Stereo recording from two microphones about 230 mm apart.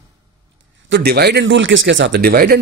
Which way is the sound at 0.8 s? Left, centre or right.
Right.